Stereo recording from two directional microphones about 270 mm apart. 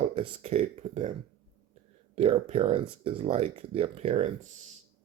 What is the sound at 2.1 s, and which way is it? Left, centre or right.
Speech, right.